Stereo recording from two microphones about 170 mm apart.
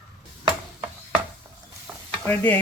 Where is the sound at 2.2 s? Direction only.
10° left (ahead or behind).